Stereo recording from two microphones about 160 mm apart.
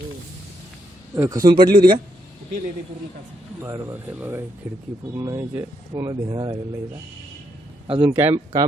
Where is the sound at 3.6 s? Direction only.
15° right (ahead or behind).